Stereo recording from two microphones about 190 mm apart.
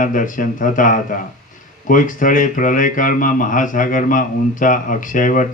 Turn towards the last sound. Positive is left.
turn(degrees=45)  # may be behind; listen again after turning